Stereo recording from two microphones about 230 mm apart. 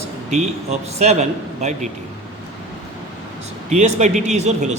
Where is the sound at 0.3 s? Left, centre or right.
Right.